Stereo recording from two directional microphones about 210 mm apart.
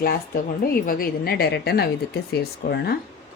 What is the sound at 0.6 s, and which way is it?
A woman's voice, 45° left (ahead or behind).